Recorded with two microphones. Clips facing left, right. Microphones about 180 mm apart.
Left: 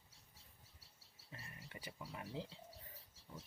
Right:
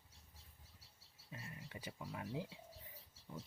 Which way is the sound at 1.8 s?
15° right (ahead or behind).